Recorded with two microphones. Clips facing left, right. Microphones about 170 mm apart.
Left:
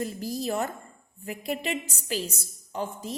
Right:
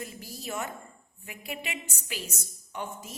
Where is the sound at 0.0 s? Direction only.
35° left (ahead or behind).